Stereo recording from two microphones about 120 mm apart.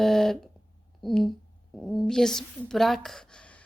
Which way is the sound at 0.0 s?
5° left (ahead or behind).